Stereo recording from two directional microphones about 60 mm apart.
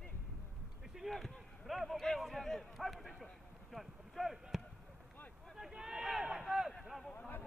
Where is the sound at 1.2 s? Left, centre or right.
Centre.